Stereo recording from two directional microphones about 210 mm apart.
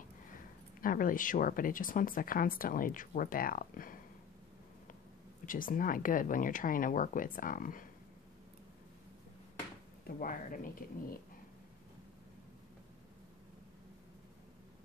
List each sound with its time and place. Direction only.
0.3 s speech: 40° left (ahead or behind)
5.4 s speech: 40° left (ahead or behind)
10.0 s speech: 40° left (ahead or behind)